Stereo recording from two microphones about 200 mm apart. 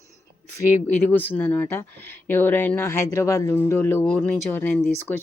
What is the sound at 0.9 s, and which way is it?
Speech, 10° left (ahead or behind).